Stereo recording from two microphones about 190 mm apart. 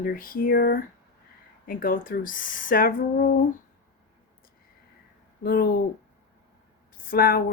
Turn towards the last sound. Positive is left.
turn(degrees=50)  # may be behind; listen again after turning